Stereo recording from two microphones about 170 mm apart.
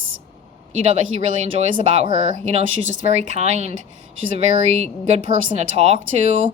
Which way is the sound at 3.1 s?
40° right (ahead or behind).